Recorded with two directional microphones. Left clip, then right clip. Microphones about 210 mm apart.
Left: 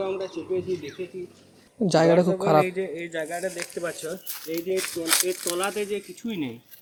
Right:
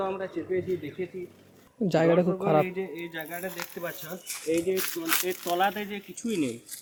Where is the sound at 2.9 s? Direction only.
20° right (ahead or behind).